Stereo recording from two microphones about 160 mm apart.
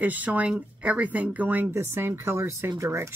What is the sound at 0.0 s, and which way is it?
Speech, 10° right (ahead or behind).